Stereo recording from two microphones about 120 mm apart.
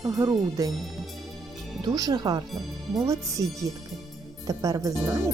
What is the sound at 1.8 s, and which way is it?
Speech, 30° right (ahead or behind).